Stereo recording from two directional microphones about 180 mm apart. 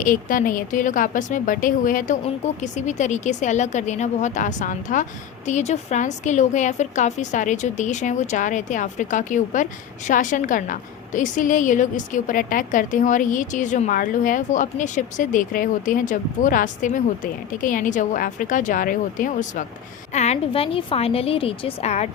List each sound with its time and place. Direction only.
0.0 s a woman's voice: 50° left (ahead or behind)